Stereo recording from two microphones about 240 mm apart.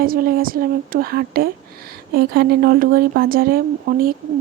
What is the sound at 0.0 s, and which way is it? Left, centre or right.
A woman's voice, right.